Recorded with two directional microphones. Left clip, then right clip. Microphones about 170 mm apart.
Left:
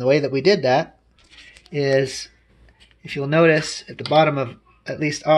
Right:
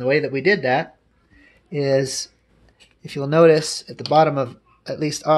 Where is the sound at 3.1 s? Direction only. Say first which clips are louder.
Right 2 dB; 10° right (ahead or behind).